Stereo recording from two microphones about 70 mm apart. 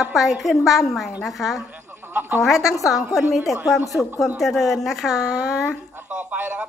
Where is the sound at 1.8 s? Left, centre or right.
Right.